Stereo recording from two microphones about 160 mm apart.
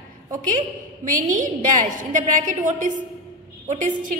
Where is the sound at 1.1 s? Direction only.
55° right (ahead or behind).